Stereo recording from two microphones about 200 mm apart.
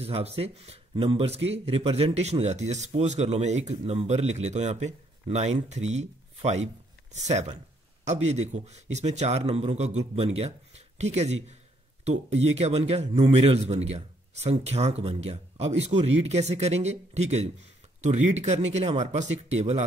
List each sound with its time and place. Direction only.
0.0 s speech: 30° right (ahead or behind)